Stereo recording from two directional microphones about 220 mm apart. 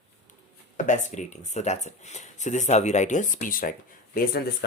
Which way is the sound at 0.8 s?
35° left (ahead or behind).